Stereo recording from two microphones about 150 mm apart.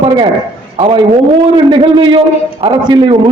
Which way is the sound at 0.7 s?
35° right (ahead or behind).